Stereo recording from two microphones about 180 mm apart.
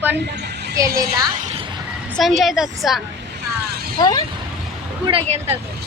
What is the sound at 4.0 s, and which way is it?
Speech, 20° left (ahead or behind).